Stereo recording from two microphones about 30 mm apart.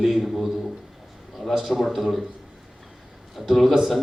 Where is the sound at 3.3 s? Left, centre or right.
Centre.